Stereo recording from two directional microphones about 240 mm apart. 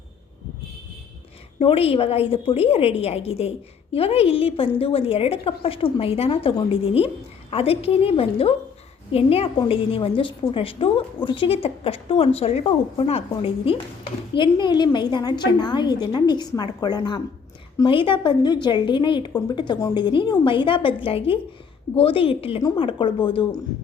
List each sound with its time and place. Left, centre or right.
1.5 s a woman's voice: left